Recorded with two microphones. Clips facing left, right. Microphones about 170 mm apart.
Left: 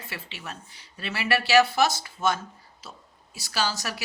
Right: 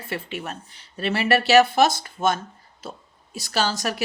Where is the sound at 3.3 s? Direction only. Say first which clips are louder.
Right 4 dB; 50° right (ahead or behind).